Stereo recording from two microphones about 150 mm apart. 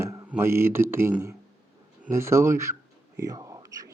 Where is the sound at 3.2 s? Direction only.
25° right (ahead or behind).